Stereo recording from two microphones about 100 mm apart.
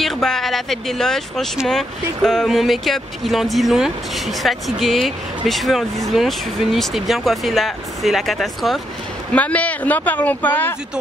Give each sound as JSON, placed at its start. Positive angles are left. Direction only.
{"t": 0.0, "sound": "speech", "side_deg": 5}
{"t": 9.3, "sound": "speech", "side_deg": 15}